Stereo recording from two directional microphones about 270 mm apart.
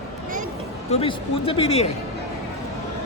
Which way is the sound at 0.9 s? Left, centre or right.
Left.